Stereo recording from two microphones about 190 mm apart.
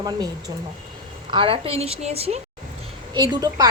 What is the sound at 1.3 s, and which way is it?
A woman's voice, 30° right (ahead or behind).